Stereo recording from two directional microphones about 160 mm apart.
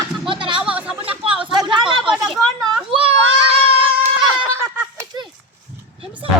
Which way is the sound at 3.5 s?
35° right (ahead or behind).